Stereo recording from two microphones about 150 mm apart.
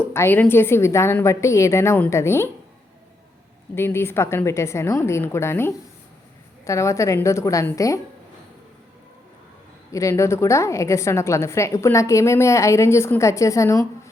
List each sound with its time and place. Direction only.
0.1 s a woman's voice: 15° left (ahead or behind)
3.8 s a woman's voice: 15° left (ahead or behind)
9.9 s a woman's voice: 20° left (ahead or behind)